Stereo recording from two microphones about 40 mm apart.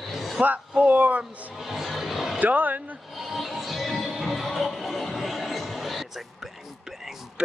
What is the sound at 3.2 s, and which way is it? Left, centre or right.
Music, centre.